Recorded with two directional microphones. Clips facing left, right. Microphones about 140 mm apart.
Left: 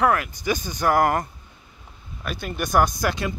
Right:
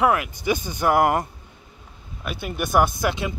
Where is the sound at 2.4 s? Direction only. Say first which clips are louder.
Right 1 dB; 10° right (ahead or behind).